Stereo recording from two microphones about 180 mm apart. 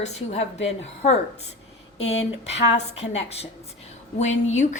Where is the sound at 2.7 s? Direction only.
35° left (ahead or behind).